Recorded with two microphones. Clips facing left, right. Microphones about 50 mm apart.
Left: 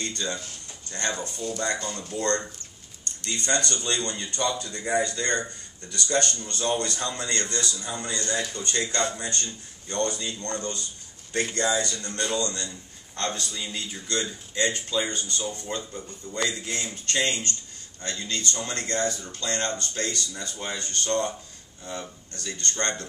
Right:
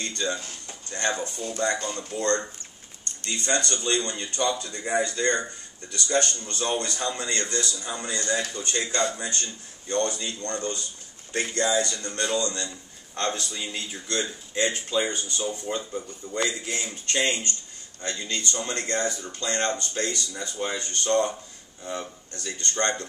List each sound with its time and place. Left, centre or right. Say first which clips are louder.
0.0 s a man's voice: right 2 dB; right
22.3 s speech: even; right